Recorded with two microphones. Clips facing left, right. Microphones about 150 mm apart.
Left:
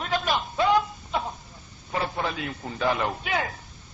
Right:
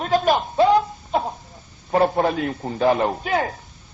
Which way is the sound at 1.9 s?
50° right (ahead or behind).